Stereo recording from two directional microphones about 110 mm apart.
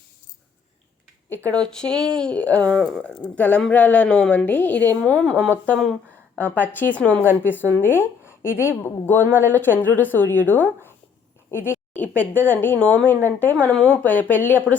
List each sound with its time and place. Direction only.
1.5 s a woman's voice: 5° left (ahead or behind)
11.5 s a sound: 20° left (ahead or behind)
12.2 s speech: 15° left (ahead or behind)